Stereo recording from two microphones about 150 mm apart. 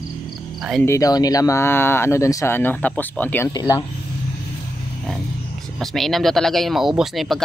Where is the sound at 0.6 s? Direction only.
Centre (ahead or behind).